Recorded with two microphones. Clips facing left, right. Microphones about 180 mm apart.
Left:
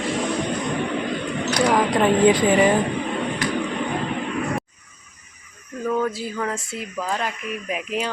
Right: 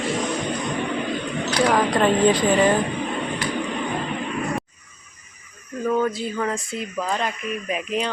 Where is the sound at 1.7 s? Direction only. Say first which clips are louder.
Left 1 dB; 15° left (ahead or behind).